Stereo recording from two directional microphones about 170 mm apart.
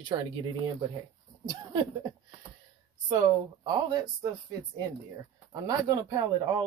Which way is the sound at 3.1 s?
20° right (ahead or behind).